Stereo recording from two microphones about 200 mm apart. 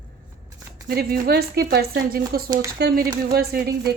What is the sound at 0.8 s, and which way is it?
A woman's voice, 50° right (ahead or behind).